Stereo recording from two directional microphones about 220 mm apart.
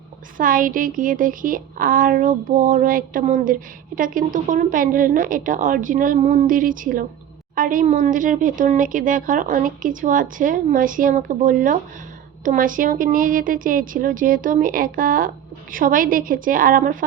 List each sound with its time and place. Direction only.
0.3 s speech: 40° right (ahead or behind)